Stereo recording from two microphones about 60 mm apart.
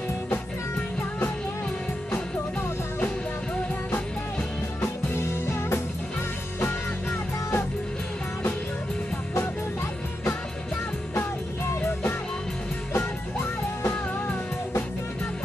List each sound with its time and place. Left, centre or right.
4.8 s music: left
12.9 s music: left